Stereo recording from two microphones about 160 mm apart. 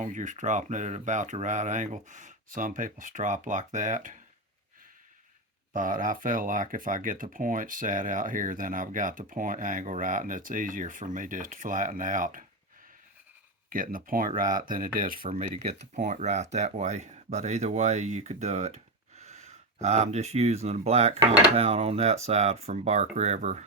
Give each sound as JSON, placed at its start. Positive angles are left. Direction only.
{"t": 0.0, "sound": "speech", "side_deg": -50}
{"t": 5.7, "sound": "speech", "side_deg": -55}
{"t": 13.7, "sound": "speech", "side_deg": -60}
{"t": 15.3, "sound": "speech", "side_deg": -50}